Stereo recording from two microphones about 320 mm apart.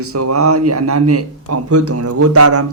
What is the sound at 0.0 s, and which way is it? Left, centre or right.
Speech, right.